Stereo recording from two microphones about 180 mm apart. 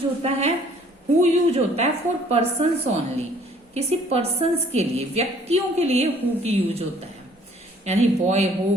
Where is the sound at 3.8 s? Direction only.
35° right (ahead or behind).